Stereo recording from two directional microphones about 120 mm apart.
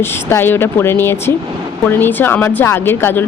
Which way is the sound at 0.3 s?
20° left (ahead or behind).